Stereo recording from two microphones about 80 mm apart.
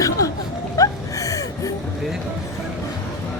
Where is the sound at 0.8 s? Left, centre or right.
Left.